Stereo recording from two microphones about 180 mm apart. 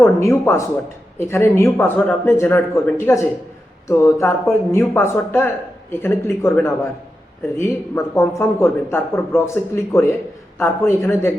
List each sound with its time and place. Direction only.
0.0 s speech: 15° left (ahead or behind)